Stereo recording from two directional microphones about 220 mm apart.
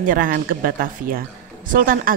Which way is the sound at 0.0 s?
40° right (ahead or behind).